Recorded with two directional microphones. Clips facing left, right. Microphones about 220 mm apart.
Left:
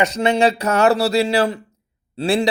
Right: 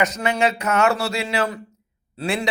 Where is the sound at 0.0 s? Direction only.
30° left (ahead or behind).